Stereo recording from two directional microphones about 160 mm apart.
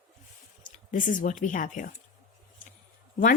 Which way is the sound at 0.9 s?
55° left (ahead or behind).